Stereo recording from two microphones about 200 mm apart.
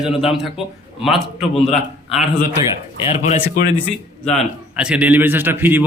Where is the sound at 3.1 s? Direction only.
35° left (ahead or behind).